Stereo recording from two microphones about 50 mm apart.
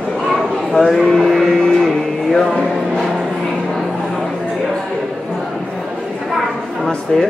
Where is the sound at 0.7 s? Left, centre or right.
Centre.